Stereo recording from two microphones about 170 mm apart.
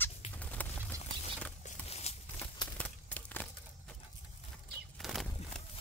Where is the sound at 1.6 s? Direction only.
40° left (ahead or behind).